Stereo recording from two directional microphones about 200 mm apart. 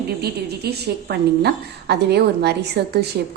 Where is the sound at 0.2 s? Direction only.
55° right (ahead or behind).